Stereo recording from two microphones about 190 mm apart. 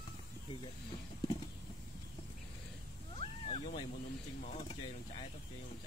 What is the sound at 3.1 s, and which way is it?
Cat, 30° left (ahead or behind).